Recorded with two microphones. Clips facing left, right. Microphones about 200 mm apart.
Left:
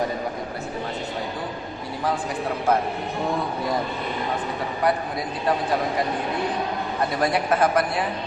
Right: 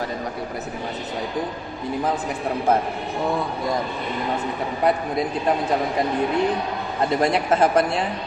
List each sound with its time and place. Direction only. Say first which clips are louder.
7.2 s speech: right 1 dB; 25° right (ahead or behind)